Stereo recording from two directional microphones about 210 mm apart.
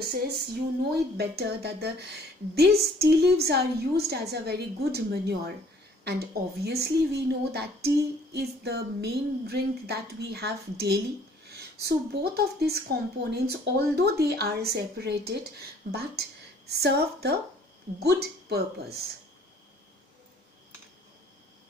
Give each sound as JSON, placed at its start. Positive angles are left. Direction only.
{"t": 0.8, "sound": "a woman's voice", "side_deg": -50}